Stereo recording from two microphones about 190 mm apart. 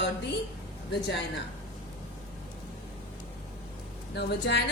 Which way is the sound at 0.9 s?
65° left (ahead or behind).